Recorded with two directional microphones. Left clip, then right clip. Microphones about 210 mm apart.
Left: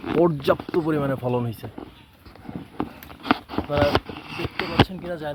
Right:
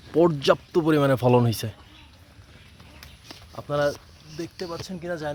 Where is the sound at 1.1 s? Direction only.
40° right (ahead or behind).